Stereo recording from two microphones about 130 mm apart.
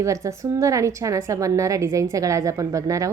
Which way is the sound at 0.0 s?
25° right (ahead or behind).